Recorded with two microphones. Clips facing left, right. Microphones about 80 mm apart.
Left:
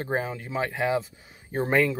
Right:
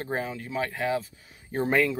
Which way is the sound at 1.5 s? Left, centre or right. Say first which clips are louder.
Left 1 dB; centre.